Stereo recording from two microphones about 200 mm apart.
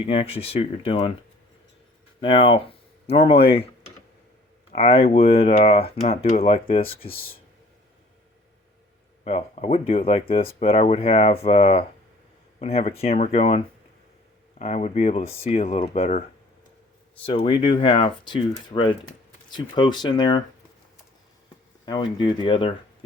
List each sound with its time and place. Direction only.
0.0 s speech: 30° left (ahead or behind)
2.2 s speech: 25° left (ahead or behind)
4.7 s speech: 30° left (ahead or behind)
9.2 s speech: 30° left (ahead or behind)
14.6 s speech: 35° left (ahead or behind)
17.2 s speech: 25° left (ahead or behind)
21.8 s speech: 20° left (ahead or behind)